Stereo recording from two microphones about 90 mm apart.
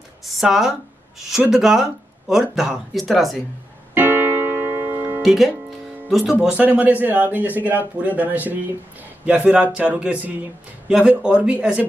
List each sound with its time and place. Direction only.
0.4 s speech: 5° right (ahead or behind)
3.9 s music: 20° right (ahead or behind)
5.2 s speech: centre (ahead or behind)
6.4 s a man's voice: 15° right (ahead or behind)